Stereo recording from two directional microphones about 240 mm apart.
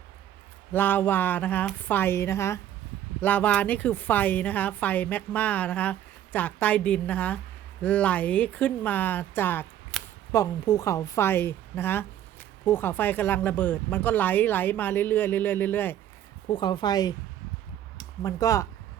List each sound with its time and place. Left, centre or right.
0.7 s speech: centre
16.5 s speech: centre